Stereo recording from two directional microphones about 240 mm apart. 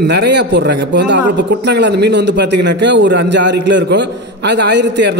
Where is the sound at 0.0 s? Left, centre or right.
Right.